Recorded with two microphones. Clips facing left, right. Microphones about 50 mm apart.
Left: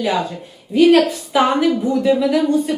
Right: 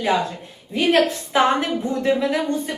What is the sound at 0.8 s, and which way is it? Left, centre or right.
A woman's voice, right.